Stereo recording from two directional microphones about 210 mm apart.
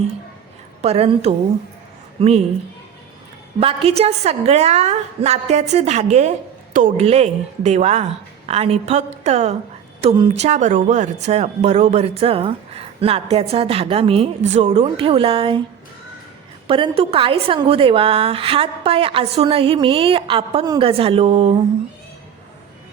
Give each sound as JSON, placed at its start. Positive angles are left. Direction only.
{"t": 0.8, "sound": "speech", "side_deg": -30}
{"t": 3.6, "sound": "a woman's voice", "side_deg": -25}
{"t": 16.6, "sound": "speech", "side_deg": -25}